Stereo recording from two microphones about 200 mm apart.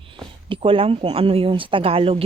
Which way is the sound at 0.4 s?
25° right (ahead or behind).